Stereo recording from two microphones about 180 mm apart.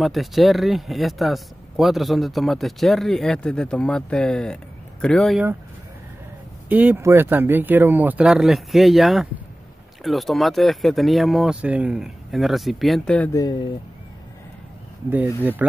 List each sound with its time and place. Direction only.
0.0 s speech: centre (ahead or behind)
6.7 s speech: 10° right (ahead or behind); by 13.4 s 5° left (ahead or behind)
13.4 s speech: 25° left (ahead or behind)